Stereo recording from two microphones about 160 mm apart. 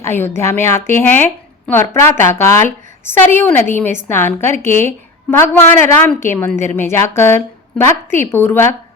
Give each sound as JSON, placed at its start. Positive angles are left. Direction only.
{"t": 0.0, "sound": "a woman's voice", "side_deg": 15}